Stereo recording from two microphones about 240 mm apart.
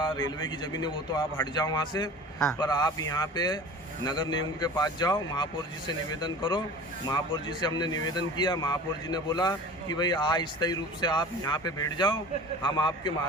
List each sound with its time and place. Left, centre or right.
0.0 s a man's voice: centre